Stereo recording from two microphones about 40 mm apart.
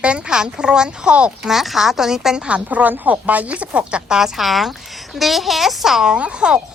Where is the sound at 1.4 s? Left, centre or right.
Centre.